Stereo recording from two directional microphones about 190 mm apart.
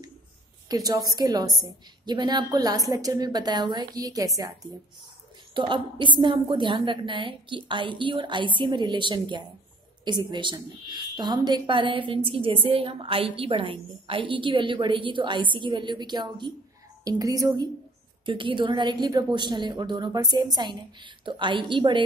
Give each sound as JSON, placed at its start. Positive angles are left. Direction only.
{"t": 0.7, "sound": "a woman's voice", "side_deg": -20}
{"t": 5.5, "sound": "a woman's voice", "side_deg": -25}